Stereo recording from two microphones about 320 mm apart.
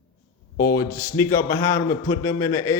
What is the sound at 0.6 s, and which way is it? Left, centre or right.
A man's voice, centre.